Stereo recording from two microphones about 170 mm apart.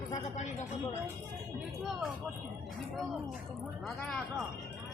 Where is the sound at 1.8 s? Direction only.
Centre (ahead or behind).